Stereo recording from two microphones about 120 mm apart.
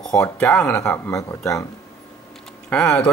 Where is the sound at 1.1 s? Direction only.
25° left (ahead or behind).